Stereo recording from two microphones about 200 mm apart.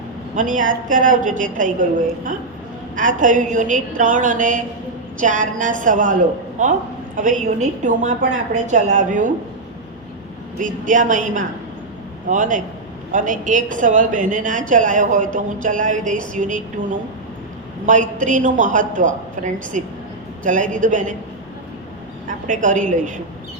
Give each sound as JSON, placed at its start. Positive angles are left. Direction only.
{"t": 0.3, "sound": "a woman's voice", "side_deg": -40}
{"t": 10.6, "sound": "a woman's voice", "side_deg": -40}
{"t": 12.3, "sound": "a woman's voice", "side_deg": -40}
{"t": 22.4, "sound": "a woman's voice", "side_deg": -40}